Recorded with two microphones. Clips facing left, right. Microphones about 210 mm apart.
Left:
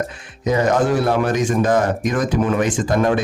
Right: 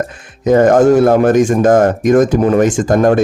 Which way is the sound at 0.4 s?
50° right (ahead or behind).